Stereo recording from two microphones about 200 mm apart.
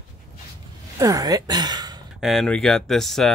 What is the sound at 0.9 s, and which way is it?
Speech, 15° right (ahead or behind).